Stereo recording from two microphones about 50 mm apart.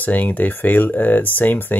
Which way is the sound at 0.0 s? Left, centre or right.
Left.